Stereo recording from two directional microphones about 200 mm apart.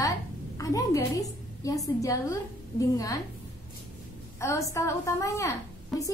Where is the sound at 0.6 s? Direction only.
15° left (ahead or behind).